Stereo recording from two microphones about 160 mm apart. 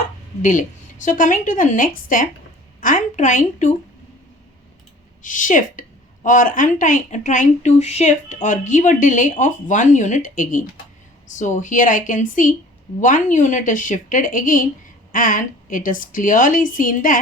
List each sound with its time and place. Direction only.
1.0 s a woman's voice: 55° left (ahead or behind)
5.2 s a woman's voice: 55° left (ahead or behind)